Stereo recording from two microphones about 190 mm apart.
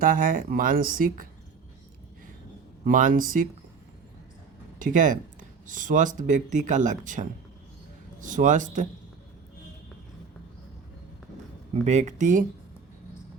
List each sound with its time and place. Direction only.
0.0 s speech: 45° right (ahead or behind)
2.8 s speech: 45° right (ahead or behind)
4.8 s speech: 45° right (ahead or behind)
11.7 s speech: 35° right (ahead or behind)